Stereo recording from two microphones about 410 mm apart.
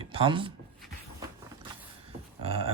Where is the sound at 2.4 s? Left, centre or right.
Centre.